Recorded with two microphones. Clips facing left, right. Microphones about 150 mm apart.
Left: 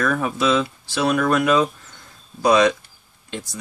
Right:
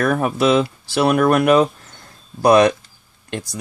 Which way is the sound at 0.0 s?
55° right (ahead or behind).